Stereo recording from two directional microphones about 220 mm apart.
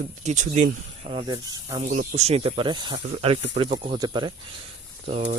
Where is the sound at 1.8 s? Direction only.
35° right (ahead or behind).